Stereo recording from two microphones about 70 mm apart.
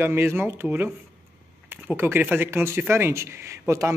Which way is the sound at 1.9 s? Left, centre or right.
Right.